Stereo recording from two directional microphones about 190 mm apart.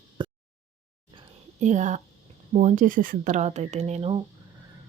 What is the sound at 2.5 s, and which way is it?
Speech, 40° right (ahead or behind).